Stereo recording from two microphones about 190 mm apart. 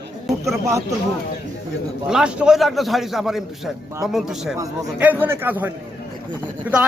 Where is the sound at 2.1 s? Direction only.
5° right (ahead or behind).